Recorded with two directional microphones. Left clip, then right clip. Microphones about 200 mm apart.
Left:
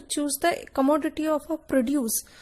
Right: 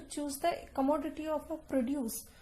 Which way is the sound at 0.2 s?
40° left (ahead or behind).